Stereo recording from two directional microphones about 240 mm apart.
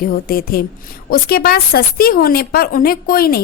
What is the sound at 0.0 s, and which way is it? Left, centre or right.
A woman's voice, left.